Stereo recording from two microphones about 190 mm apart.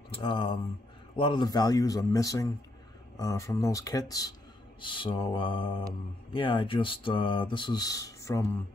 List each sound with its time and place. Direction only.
0.1 s speech: 25° left (ahead or behind)